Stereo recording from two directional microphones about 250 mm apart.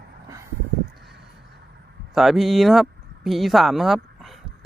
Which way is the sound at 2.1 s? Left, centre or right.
Centre.